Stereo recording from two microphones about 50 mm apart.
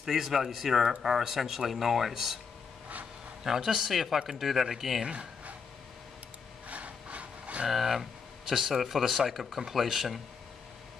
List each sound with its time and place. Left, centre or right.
0.0 s speech: centre
3.4 s speech: centre
5.0 s speech: centre
6.7 s a sound: right
7.6 s speech: centre